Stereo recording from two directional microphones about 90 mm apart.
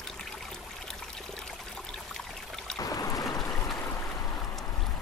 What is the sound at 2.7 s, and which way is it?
Boat, 45° left (ahead or behind).